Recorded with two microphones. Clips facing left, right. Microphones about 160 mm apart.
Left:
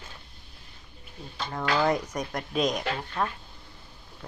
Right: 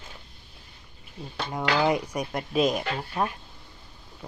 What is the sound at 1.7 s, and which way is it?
Speech, 10° right (ahead or behind).